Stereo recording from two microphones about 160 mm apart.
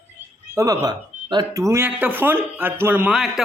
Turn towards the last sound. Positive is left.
turn(degrees=0)  # may be behind; listen again after turning